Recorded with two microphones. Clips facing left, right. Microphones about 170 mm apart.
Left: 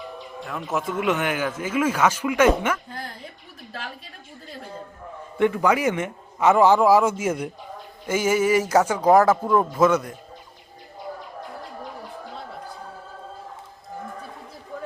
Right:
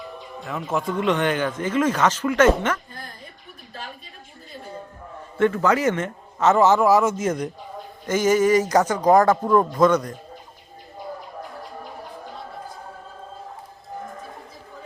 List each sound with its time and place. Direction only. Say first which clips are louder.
0.4 s a man's voice: right 2 dB; centre (ahead or behind)
5.4 s a man's voice: right 1 dB; 15° left (ahead or behind)